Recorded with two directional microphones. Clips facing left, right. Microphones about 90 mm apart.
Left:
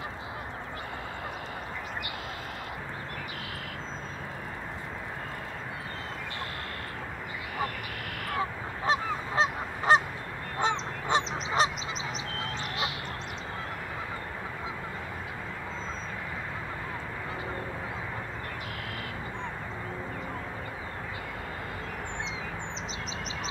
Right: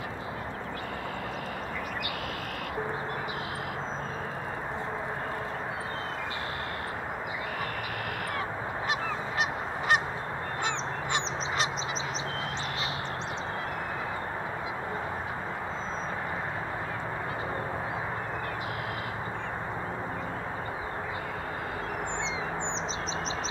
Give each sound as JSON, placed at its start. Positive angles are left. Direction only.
{"t": 8.8, "sound": "goose", "side_deg": 30}
{"t": 11.1, "sound": "goose", "side_deg": 30}